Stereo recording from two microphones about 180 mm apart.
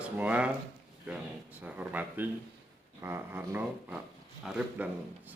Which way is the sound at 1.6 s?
10° right (ahead or behind).